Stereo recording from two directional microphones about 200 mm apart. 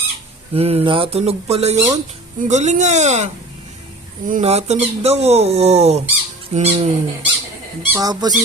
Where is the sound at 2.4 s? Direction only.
35° right (ahead or behind).